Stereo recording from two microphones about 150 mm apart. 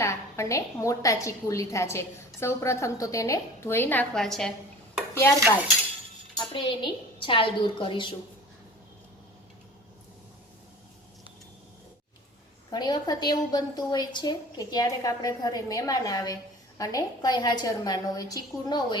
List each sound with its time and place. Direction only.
0.0 s a woman's voice: 20° left (ahead or behind); by 4.5 s 5° left (ahead or behind)
6.3 s a woman's voice: 30° left (ahead or behind)
12.7 s a woman's voice: 30° left (ahead or behind)